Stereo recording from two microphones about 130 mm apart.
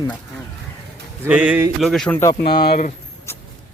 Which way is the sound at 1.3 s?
10° right (ahead or behind).